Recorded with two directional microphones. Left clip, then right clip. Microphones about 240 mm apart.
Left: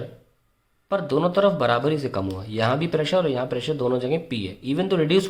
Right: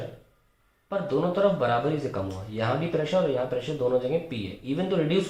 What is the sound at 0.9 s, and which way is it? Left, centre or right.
Speech, left.